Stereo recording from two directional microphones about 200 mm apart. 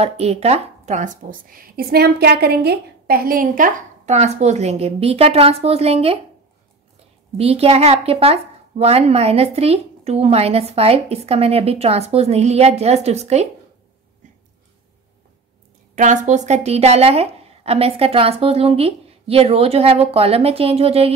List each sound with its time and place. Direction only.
0.0 s speech: 30° right (ahead or behind)
7.3 s speech: 30° right (ahead or behind)
15.9 s a woman's voice: 40° right (ahead or behind)